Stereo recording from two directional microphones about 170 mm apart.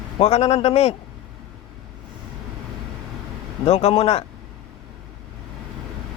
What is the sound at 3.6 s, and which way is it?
Speech, 35° left (ahead or behind).